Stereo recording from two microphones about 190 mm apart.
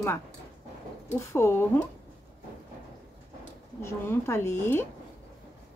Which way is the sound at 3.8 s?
15° left (ahead or behind).